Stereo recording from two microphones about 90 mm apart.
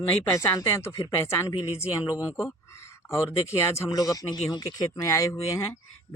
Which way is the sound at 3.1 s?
30° left (ahead or behind).